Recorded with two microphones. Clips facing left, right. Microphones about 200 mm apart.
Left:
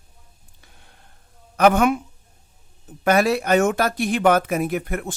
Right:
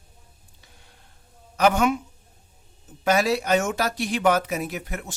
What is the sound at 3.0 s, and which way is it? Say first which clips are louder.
Speech: left 3 dB; 55° left (ahead or behind).